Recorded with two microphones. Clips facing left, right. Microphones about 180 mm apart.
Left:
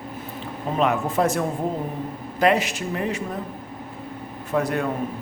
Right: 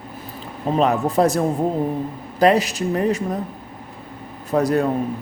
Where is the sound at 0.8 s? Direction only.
35° right (ahead or behind).